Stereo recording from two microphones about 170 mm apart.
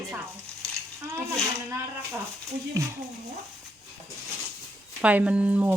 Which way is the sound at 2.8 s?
20° right (ahead or behind).